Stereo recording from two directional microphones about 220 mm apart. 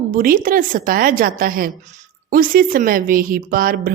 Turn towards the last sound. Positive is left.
turn(degrees=-40)  # may be behind; listen again after turning